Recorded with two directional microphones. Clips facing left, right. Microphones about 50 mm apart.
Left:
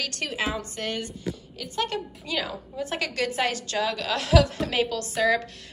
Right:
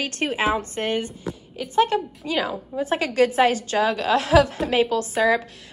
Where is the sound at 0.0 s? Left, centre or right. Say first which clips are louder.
Right 6 dB; right.